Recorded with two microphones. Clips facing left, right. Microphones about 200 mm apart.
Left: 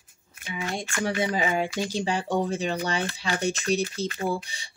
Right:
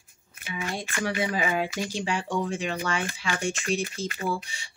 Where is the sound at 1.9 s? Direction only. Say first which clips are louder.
Left 3 dB; 35° left (ahead or behind).